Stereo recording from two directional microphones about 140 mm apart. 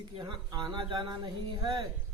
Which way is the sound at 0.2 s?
30° right (ahead or behind).